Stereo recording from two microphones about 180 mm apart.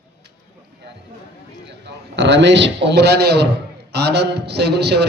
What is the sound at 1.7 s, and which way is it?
A man's voice, 70° right (ahead or behind).